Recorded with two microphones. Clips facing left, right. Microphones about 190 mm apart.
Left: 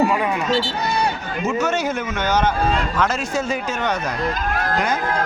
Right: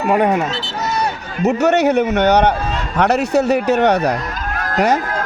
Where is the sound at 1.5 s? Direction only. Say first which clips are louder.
Right 8 dB; 65° right (ahead or behind).